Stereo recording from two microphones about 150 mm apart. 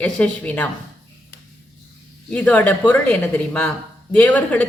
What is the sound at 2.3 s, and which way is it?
Speech, 10° left (ahead or behind).